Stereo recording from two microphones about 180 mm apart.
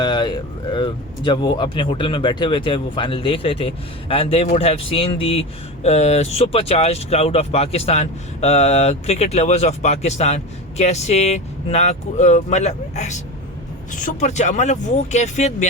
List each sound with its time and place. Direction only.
0.0 s speech: 25° left (ahead or behind); by 15.5 s 40° left (ahead or behind)